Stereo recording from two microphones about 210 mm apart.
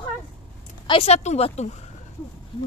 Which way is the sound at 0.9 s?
30° left (ahead or behind).